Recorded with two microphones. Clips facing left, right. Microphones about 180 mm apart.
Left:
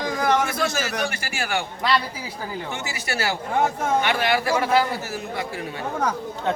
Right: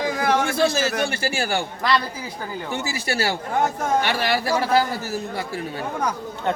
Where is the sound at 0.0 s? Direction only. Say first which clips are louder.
Right 1 dB; 5° right (ahead or behind).